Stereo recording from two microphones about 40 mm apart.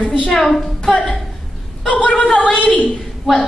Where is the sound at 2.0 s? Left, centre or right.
Centre.